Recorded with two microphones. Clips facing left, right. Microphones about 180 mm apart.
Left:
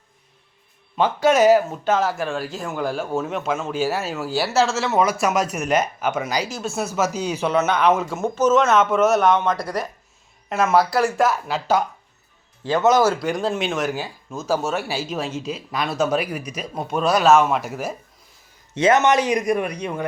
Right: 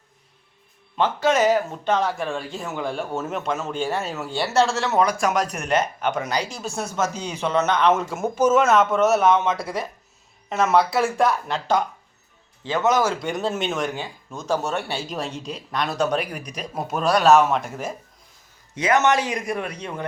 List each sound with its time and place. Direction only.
0.9 s speech: 10° left (ahead or behind)
13.1 s speech: centre (ahead or behind)
18.7 s a man's voice: 25° left (ahead or behind)